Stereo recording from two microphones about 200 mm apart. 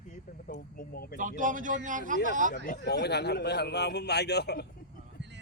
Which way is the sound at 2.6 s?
50° left (ahead or behind).